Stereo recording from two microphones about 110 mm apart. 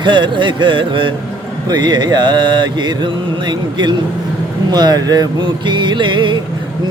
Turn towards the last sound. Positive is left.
turn(degrees=-45)  # may be behind; listen again after turning